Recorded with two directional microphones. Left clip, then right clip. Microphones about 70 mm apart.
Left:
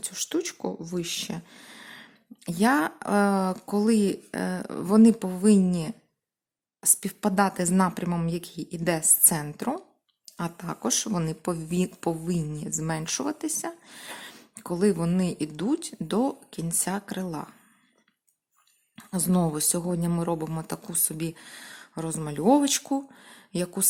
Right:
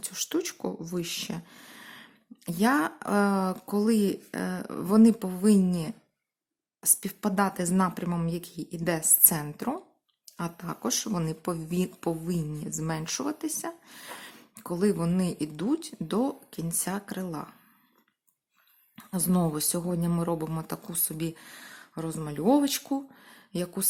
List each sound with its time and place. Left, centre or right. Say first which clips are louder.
0.0 s speech: left 1 dB; centre; by 17.5 s left
18.9 s a sound: left 2 dB; centre
19.5 s speech: left 2 dB; centre